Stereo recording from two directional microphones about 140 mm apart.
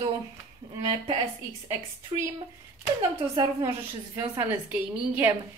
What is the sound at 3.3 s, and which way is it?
A woman's voice, 25° right (ahead or behind).